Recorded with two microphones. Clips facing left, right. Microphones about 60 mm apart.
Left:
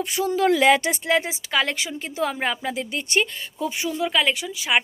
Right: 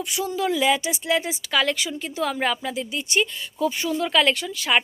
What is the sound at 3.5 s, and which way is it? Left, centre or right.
Speech, left.